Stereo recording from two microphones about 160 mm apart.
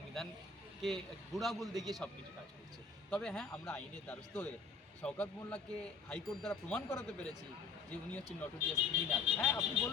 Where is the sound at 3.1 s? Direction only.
5° left (ahead or behind).